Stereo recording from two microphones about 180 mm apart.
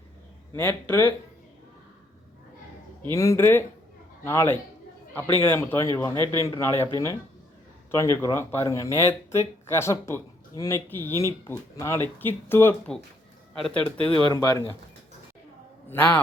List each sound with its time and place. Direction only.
0.5 s speech: 10° left (ahead or behind)
3.1 s a man's voice: 15° left (ahead or behind)
14.3 s speech: 20° left (ahead or behind)
15.9 s speech: 10° left (ahead or behind)